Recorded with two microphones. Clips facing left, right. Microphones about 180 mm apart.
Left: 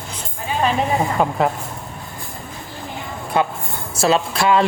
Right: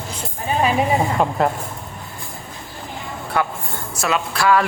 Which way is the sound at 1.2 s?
Centre (ahead or behind).